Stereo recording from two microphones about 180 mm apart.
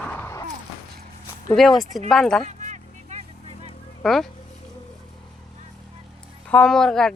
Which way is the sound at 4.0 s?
Centre (ahead or behind).